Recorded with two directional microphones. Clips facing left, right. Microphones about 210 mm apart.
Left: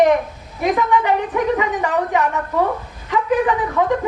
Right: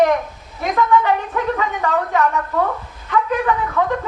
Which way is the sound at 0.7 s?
15° left (ahead or behind).